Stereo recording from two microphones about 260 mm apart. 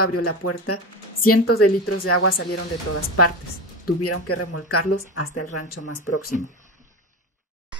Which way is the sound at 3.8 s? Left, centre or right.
Left.